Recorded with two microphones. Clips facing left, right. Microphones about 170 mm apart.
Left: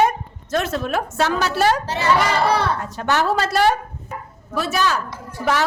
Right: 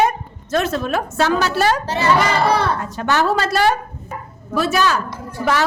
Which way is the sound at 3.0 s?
90° right.